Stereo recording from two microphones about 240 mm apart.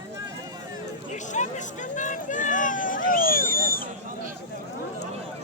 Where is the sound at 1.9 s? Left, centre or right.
Left.